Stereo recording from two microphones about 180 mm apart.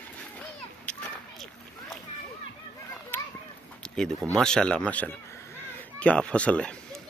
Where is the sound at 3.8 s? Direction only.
5° left (ahead or behind).